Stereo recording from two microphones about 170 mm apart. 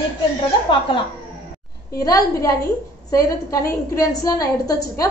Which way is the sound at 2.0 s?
20° left (ahead or behind).